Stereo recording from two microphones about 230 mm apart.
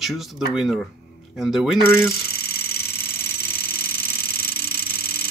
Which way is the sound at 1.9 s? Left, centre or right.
Centre.